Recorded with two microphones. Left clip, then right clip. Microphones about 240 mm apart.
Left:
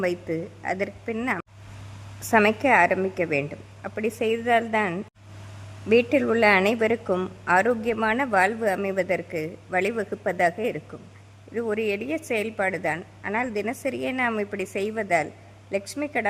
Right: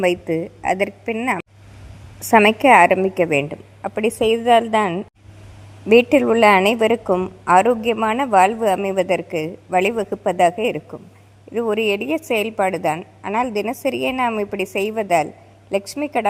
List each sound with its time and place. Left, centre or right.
0.0 s a woman's voice: centre
7.1 s a woman's voice: centre
7.4 s a woman's voice: centre